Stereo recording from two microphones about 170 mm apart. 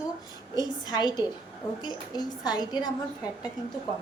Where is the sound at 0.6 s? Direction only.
25° left (ahead or behind).